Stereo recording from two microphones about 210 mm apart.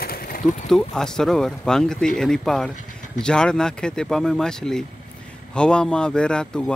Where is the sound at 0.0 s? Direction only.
45° left (ahead or behind).